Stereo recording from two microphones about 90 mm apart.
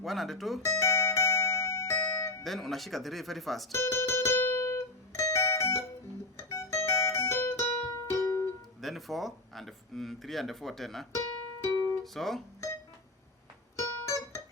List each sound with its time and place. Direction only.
0.0 s speech: centre (ahead or behind)
0.6 s music: 35° left (ahead or behind)
2.4 s speech: centre (ahead or behind)
3.7 s music: 30° left (ahead or behind)
8.8 s speech: centre (ahead or behind)
12.0 s speech: centre (ahead or behind)
12.6 s music: 35° left (ahead or behind)